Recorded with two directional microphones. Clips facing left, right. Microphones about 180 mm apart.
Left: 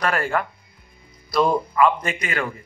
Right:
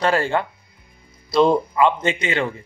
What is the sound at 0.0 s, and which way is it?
A man's voice, 25° right (ahead or behind).